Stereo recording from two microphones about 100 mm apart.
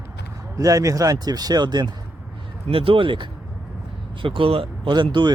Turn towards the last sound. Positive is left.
turn(degrees=-50)  # may be behind; listen again after turning